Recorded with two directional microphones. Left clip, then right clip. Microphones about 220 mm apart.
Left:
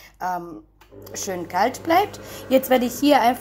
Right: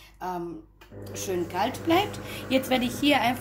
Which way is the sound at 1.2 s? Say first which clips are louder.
Left 6 dB; 30° left (ahead or behind).